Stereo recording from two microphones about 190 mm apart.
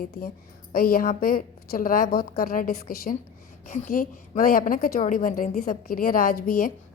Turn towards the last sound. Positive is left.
turn(degrees=50)  # may be behind; listen again after turning